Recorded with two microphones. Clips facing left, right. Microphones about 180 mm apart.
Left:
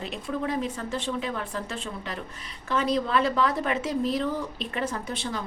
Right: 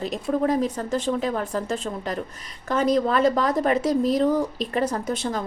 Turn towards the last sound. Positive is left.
turn(degrees=-45)  # may be behind; listen again after turning